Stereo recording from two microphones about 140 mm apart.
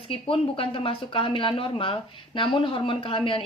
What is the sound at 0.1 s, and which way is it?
A woman's voice, 40° left (ahead or behind).